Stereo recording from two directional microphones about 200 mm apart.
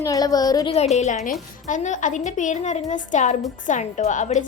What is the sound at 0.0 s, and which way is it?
A woman's voice, 15° left (ahead or behind).